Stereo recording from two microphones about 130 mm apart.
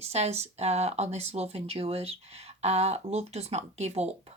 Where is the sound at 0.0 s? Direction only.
55° right (ahead or behind).